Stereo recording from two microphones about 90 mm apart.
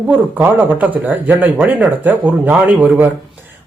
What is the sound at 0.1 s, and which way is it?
Speech, 20° right (ahead or behind).